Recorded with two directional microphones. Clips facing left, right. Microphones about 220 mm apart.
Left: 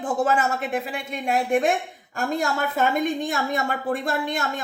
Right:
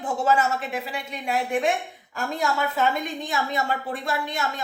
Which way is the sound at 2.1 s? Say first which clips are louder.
Left 2 dB; 50° left (ahead or behind).